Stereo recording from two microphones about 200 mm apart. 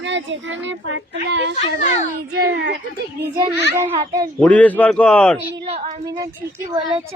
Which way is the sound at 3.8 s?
15° right (ahead or behind).